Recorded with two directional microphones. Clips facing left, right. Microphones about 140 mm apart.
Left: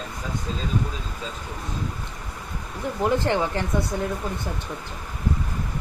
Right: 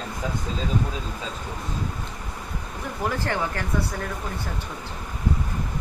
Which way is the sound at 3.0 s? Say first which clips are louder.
Left 4 dB; 20° left (ahead or behind).